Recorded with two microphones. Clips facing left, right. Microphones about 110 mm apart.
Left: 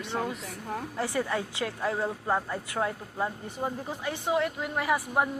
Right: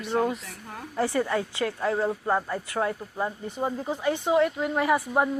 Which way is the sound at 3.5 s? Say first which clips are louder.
Right 5 dB; 25° right (ahead or behind).